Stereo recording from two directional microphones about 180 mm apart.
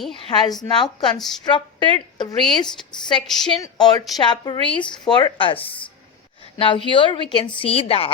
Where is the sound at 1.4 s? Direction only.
25° left (ahead or behind).